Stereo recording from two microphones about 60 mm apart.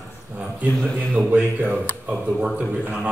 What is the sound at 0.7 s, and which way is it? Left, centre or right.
Speech, centre.